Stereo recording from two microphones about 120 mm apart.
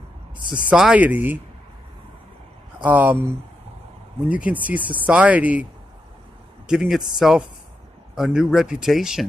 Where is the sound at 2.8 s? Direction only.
15° right (ahead or behind).